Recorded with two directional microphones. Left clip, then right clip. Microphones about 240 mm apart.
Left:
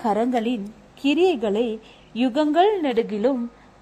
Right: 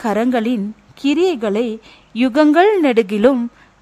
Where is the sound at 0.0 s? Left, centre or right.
Right.